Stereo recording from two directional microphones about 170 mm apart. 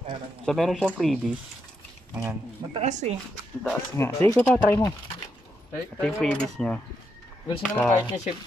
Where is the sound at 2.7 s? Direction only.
40° right (ahead or behind).